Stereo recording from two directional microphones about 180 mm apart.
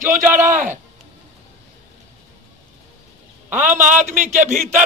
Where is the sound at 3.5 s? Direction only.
45° right (ahead or behind).